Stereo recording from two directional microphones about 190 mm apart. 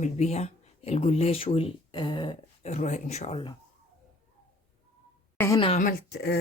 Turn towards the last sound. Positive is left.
turn(degrees=60)  # may be behind; listen again after turning